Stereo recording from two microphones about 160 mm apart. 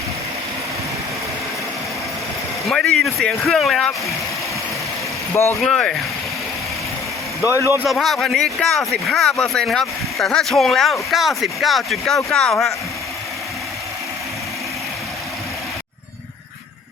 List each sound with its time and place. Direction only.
2.6 s speech: 5° left (ahead or behind)
5.3 s speech: 15° left (ahead or behind)
5.5 s speech: 5° left (ahead or behind)
7.4 s speech: 15° right (ahead or behind)
7.9 s speech: centre (ahead or behind)